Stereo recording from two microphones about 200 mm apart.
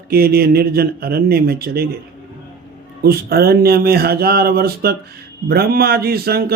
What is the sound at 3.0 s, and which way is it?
A man's voice, 50° right (ahead or behind).